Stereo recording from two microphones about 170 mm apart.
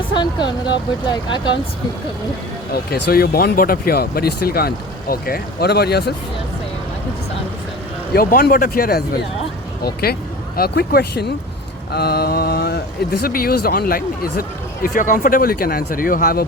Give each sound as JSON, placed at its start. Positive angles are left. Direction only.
{"t": 0.2, "sound": "speech", "side_deg": 25}
{"t": 2.7, "sound": "speech", "side_deg": 65}
{"t": 8.1, "sound": "speech", "side_deg": 60}